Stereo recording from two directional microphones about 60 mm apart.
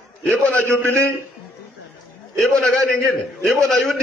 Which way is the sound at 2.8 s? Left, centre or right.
Centre.